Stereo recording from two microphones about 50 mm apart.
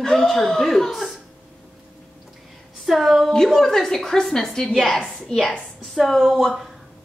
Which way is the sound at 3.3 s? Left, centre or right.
Centre.